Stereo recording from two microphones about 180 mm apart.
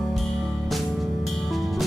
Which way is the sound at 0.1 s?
Centre (ahead or behind).